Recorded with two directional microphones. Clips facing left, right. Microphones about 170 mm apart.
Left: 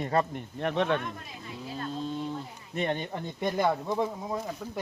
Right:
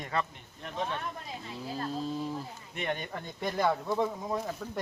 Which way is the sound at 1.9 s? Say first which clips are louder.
Left 2 dB; 5° right (ahead or behind).